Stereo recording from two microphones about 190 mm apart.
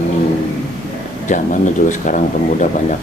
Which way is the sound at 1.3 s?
40° left (ahead or behind).